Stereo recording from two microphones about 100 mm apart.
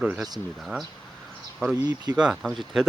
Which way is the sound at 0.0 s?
10° right (ahead or behind).